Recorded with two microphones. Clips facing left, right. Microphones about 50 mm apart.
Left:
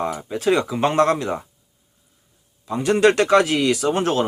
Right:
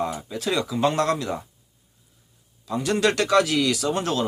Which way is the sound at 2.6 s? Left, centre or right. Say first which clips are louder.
Left 6 dB; left.